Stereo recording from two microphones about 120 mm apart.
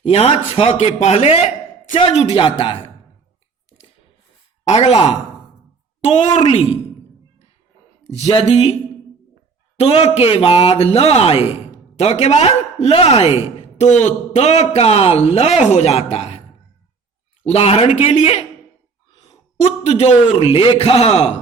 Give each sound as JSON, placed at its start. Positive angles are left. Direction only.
{"t": 0.0, "sound": "a man's voice", "side_deg": 55}
{"t": 2.3, "sound": "speech", "side_deg": 45}
{"t": 4.6, "sound": "a man's voice", "side_deg": 60}
{"t": 6.1, "sound": "a man's voice", "side_deg": 50}
{"t": 8.0, "sound": "speech", "side_deg": 60}
{"t": 9.7, "sound": "a man's voice", "side_deg": 55}
{"t": 13.6, "sound": "a man's voice", "side_deg": 75}
{"t": 17.4, "sound": "a man's voice", "side_deg": 65}
{"t": 17.9, "sound": "a man's voice", "side_deg": 65}